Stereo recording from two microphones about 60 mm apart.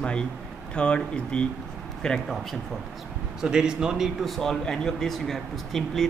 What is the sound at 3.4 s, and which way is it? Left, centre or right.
Speech, centre.